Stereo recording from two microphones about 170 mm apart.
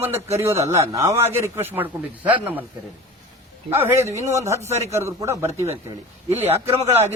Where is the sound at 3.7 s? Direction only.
15° right (ahead or behind).